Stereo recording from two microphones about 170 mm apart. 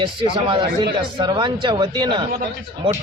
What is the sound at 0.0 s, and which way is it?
A man's voice, 30° right (ahead or behind).